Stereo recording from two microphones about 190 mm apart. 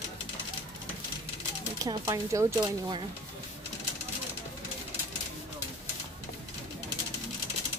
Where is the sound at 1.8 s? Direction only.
15° right (ahead or behind).